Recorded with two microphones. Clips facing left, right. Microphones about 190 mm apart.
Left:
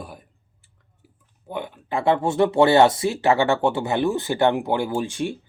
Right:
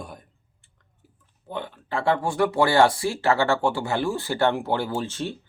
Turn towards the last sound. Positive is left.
turn(degrees=15)  # may be behind; listen again after turning